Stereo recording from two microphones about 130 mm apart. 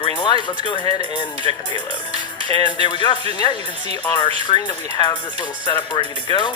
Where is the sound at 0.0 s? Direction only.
35° left (ahead or behind).